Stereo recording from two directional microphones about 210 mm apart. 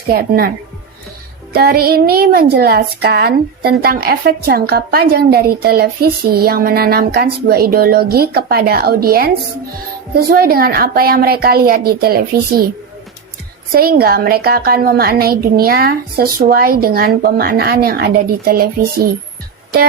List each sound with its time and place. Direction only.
0.1 s a child's voice: 45° right (ahead or behind)
1.5 s a child's voice: 45° right (ahead or behind)
13.7 s a child's voice: 45° right (ahead or behind)